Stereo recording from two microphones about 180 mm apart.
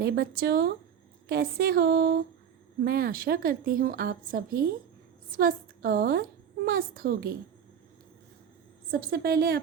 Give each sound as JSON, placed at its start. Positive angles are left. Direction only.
{"t": 0.0, "sound": "music", "side_deg": -60}
{"t": 2.8, "sound": "a woman's voice", "side_deg": -55}
{"t": 6.7, "sound": "music", "side_deg": -55}
{"t": 8.9, "sound": "music", "side_deg": -55}